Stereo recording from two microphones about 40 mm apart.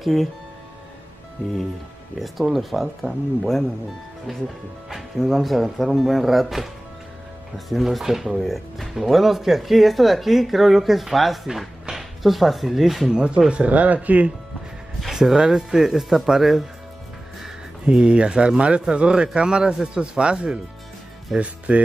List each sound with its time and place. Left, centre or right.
0.0 s speech: centre
2.1 s speech: centre
4.8 s speech: centre
13.1 s speech: right
15.0 s speech: centre
17.8 s speech: right